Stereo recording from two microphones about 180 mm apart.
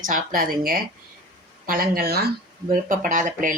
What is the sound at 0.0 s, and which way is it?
A woman's voice, 50° right (ahead or behind).